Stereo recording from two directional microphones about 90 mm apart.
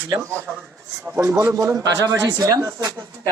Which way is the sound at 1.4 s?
35° right (ahead or behind).